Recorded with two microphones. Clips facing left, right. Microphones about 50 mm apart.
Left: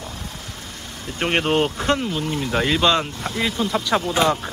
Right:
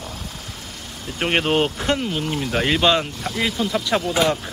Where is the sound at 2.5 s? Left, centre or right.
Centre.